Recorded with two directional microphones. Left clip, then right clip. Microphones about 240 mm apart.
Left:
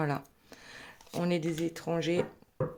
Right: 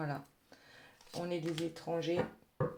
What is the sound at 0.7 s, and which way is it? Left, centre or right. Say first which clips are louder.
Speech: left 7 dB; left.